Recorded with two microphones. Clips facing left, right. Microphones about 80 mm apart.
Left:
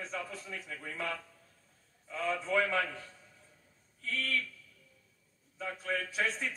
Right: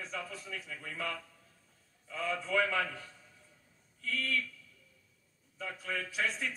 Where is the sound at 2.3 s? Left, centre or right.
Left.